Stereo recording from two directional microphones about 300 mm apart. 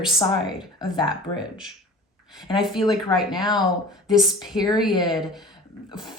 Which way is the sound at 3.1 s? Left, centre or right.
Centre.